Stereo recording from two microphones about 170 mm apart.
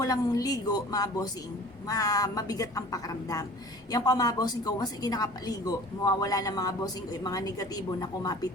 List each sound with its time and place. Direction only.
0.0 s a woman's voice: 20° left (ahead or behind)